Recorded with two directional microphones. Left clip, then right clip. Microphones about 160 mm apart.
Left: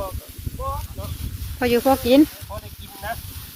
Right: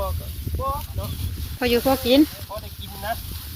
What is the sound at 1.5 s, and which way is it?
Speech, 40° left (ahead or behind).